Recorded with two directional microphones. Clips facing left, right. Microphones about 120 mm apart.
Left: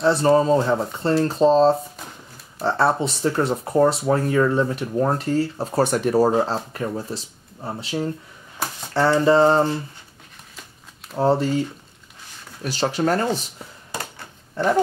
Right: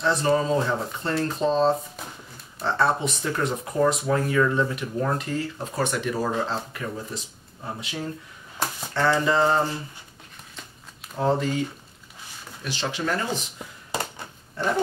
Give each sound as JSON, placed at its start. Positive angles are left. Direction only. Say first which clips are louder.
{"t": 0.0, "sound": "speech", "louder": "left 6 dB", "side_deg": 30}
{"t": 11.1, "sound": "speech", "louder": "left 4 dB", "side_deg": 35}
{"t": 12.6, "sound": "speech", "louder": "left 7 dB", "side_deg": 40}